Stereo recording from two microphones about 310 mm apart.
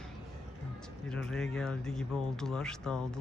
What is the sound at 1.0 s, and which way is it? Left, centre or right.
Speech, centre.